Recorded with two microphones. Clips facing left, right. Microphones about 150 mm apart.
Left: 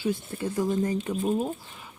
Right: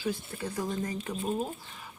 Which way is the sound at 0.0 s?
25° left (ahead or behind).